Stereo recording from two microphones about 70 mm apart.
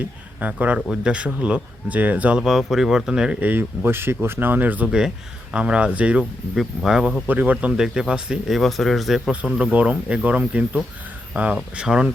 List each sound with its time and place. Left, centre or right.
0.0 s speech: right
2.4 s speech: centre
3.4 s speech: right
4.9 s speech: centre
7.3 s speech: right
7.7 s speech: centre
8.5 s speech: centre
9.7 s speech: centre
11.5 s speech: centre